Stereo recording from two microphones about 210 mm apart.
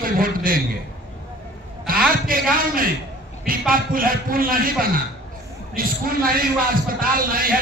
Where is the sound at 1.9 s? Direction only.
45° right (ahead or behind).